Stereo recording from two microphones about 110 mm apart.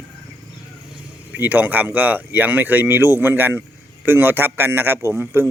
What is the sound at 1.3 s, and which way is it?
A man's voice, 15° right (ahead or behind).